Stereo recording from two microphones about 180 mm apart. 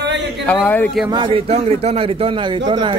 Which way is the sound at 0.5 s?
10° left (ahead or behind).